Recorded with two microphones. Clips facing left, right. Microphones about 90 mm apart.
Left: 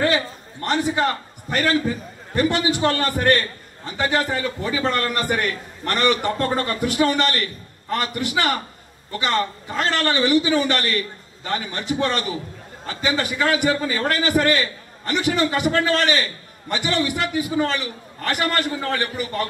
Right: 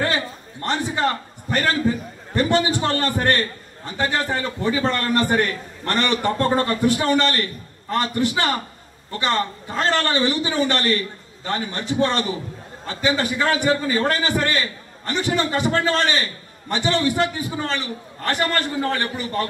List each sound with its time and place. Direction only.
0.7 s a man's voice: 35° right (ahead or behind)